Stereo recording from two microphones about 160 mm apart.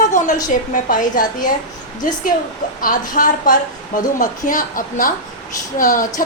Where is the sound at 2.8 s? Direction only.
55° left (ahead or behind).